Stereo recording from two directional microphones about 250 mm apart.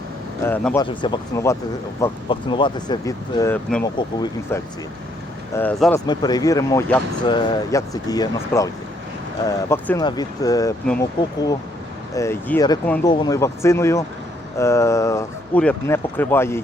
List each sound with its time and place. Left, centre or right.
0.4 s speech: centre
3.9 s speech: centre